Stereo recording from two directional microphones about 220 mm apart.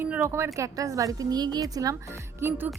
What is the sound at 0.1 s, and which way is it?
Speech, 10° right (ahead or behind).